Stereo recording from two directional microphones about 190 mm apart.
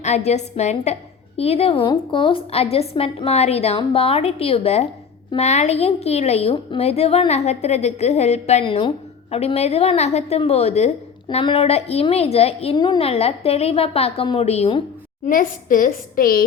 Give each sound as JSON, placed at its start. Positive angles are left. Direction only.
{"t": 0.0, "sound": "a woman's voice", "side_deg": 35}
{"t": 15.3, "sound": "a woman's voice", "side_deg": 45}